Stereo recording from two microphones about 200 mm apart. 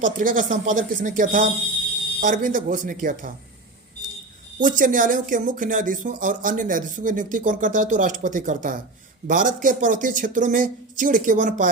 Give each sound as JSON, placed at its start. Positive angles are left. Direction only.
{"t": 0.0, "sound": "speech", "side_deg": -40}
{"t": 4.6, "sound": "speech", "side_deg": -40}